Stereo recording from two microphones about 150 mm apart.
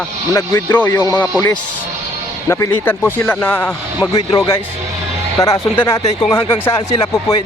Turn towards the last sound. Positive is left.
turn(degrees=20)  # may be behind; listen again after turning